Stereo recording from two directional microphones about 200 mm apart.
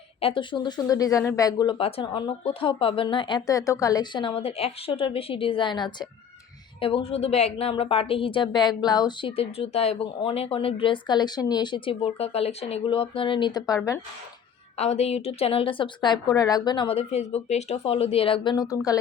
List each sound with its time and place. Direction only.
0.2 s speech: 25° left (ahead or behind)
14.8 s speech: 35° left (ahead or behind)